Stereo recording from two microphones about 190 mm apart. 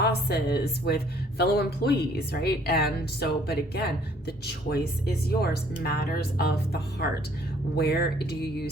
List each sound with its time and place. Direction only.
0.0 s speech: 55° left (ahead or behind)